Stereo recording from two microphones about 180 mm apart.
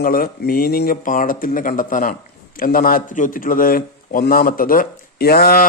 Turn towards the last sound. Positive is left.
turn(degrees=60)  # may be behind; listen again after turning